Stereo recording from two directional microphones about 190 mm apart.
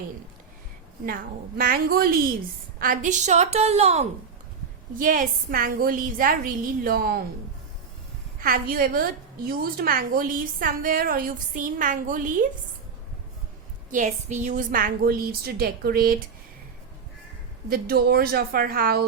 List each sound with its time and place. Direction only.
1.0 s a woman's voice: 50° right (ahead or behind); by 4.0 s 35° right (ahead or behind)
4.9 s a woman's voice: 45° right (ahead or behind)
8.4 s a woman's voice: 50° right (ahead or behind)
13.9 s a woman's voice: 40° right (ahead or behind)
17.7 s a woman's voice: 55° right (ahead or behind)